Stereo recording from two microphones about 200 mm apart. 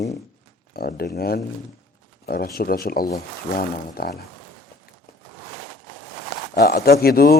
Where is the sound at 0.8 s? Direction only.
50° left (ahead or behind).